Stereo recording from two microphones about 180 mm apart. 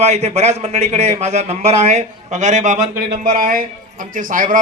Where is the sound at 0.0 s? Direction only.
40° right (ahead or behind).